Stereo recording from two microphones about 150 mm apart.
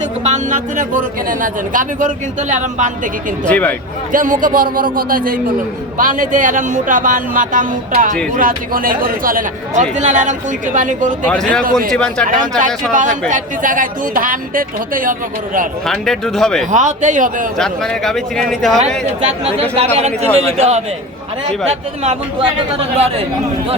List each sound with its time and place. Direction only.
0.3 s speech: 60° right (ahead or behind)
3.4 s speech: 10° left (ahead or behind)
4.1 s speech: 65° right (ahead or behind)
11.3 s speech: 5° left (ahead or behind)
12.2 s speech: 60° right (ahead or behind)
15.9 s speech: 5° left (ahead or behind)
16.7 s speech: 55° right (ahead or behind)
17.6 s speech: 5° left (ahead or behind)
19.7 s a man's voice: 45° right (ahead or behind)